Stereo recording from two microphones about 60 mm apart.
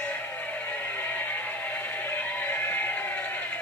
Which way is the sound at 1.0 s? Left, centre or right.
Left.